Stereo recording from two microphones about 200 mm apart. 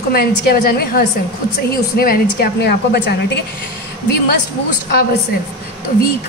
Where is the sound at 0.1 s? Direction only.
50° left (ahead or behind).